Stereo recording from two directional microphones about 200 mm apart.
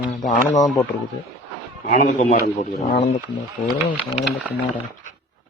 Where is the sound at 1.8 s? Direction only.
40° left (ahead or behind).